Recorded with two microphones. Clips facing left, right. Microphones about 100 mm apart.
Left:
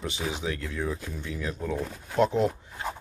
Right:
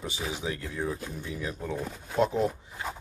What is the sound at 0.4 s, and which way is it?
Speech, 20° right (ahead or behind).